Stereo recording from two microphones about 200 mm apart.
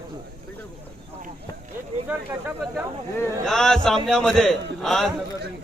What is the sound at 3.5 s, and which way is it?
A man's voice, 5° left (ahead or behind).